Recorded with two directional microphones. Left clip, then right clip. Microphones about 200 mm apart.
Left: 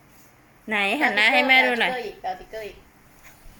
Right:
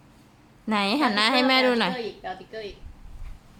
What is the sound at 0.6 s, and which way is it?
A woman's voice, 25° right (ahead or behind).